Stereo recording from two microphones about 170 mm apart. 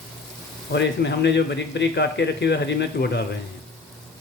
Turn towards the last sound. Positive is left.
turn(degrees=80)